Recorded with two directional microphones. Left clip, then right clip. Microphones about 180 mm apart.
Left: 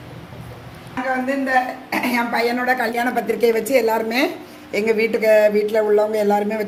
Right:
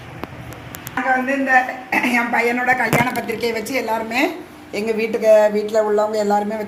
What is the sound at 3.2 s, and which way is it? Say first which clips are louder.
Speech: left 4 dB; 70° left (ahead or behind).